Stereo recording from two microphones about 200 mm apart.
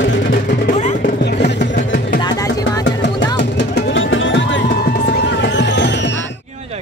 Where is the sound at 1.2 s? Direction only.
55° left (ahead or behind).